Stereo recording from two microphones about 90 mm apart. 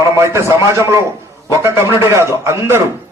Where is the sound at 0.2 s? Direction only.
35° right (ahead or behind).